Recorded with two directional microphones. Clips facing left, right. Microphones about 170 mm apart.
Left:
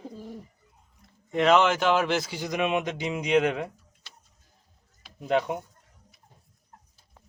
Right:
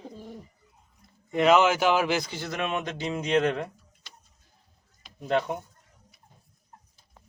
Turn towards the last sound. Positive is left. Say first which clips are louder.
# left 1 dB
turn(degrees=10)  # may be behind; listen again after turning